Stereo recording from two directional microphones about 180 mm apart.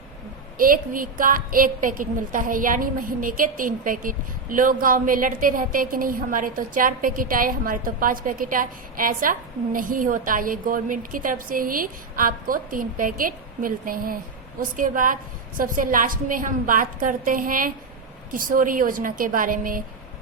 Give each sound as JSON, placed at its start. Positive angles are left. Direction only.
{"t": 0.5, "sound": "a woman's voice", "side_deg": -50}